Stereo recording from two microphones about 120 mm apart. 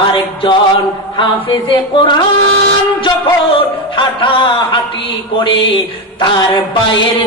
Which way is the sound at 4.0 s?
45° left (ahead or behind).